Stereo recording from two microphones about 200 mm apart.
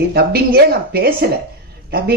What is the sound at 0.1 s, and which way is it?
Speech, 50° right (ahead or behind).